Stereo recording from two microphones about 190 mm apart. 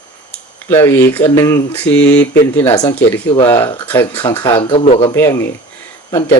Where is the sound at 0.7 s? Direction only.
10° left (ahead or behind).